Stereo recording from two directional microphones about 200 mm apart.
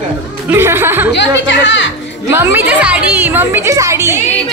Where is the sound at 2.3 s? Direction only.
10° right (ahead or behind).